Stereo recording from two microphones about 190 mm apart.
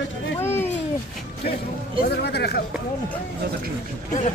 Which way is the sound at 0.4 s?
10° left (ahead or behind).